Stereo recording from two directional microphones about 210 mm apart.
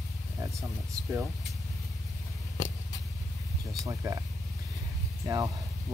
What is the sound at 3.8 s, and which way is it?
Speech, 15° right (ahead or behind).